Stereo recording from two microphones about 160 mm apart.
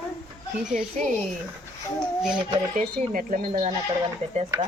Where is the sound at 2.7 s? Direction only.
60° right (ahead or behind).